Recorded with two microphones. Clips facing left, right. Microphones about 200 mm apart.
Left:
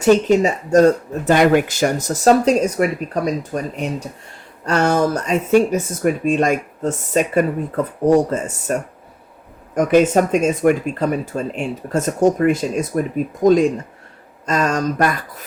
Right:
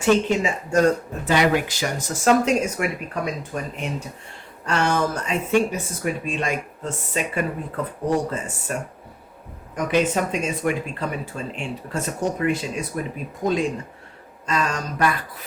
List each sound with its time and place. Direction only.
0.0 s speech: 40° left (ahead or behind)
1.3 s speech: 50° left (ahead or behind)
9.7 s speech: 45° left (ahead or behind)